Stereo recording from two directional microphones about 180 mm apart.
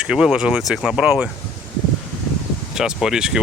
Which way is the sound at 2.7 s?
5° right (ahead or behind).